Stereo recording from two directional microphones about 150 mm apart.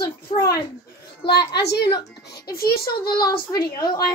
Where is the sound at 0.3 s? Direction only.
40° left (ahead or behind).